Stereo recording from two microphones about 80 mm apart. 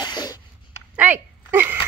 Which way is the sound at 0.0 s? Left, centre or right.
Left.